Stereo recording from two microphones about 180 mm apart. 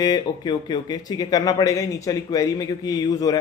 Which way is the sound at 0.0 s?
20° left (ahead or behind).